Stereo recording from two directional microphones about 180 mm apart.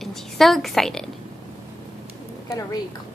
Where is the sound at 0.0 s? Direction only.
Centre (ahead or behind).